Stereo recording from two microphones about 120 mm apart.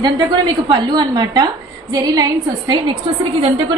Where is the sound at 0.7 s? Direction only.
35° right (ahead or behind).